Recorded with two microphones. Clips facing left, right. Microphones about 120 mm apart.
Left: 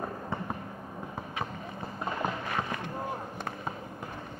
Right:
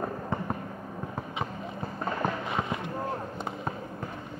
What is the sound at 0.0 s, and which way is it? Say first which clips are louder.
Fireworks: right 3 dB; 10° right (ahead or behind).